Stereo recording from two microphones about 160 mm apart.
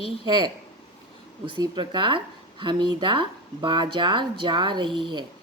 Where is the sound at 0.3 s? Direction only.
30° right (ahead or behind).